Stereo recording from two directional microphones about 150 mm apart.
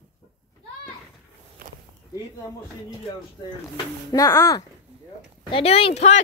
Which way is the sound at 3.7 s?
25° left (ahead or behind).